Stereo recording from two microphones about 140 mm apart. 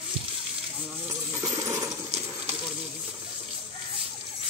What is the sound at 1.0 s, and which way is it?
Coin, 25° right (ahead or behind).